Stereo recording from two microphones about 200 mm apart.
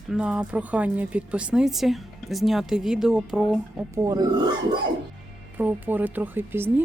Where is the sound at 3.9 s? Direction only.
15° right (ahead or behind).